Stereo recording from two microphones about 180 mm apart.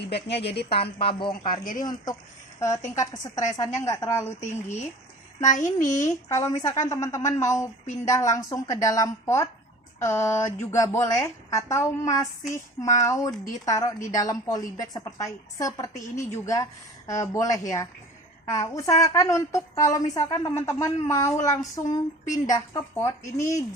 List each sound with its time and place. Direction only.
0.1 s a woman's voice: 65° left (ahead or behind)
0.7 s a woman's voice: 30° left (ahead or behind)
1.3 s a child's voice: 50° left (ahead or behind)
1.8 s a woman's voice: 20° left (ahead or behind)
5.4 s a child's voice: 45° left (ahead or behind)
6.1 s a woman's voice: 15° left (ahead or behind)